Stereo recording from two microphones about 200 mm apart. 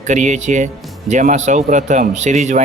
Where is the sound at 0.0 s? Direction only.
35° right (ahead or behind).